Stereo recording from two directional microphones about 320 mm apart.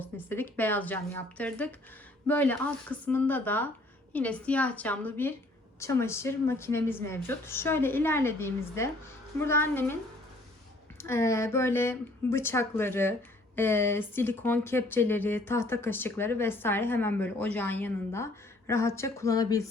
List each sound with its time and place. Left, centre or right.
0.0 s a woman's voice: centre
11.0 s speech: centre